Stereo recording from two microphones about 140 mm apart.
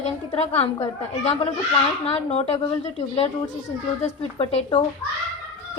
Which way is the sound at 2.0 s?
50° left (ahead or behind).